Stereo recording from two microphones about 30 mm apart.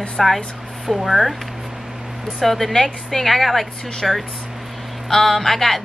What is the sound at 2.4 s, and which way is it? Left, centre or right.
Speech, centre.